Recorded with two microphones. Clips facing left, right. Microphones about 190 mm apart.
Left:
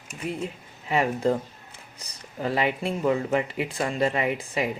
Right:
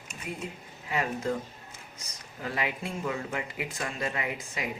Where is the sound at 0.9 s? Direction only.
30° left (ahead or behind).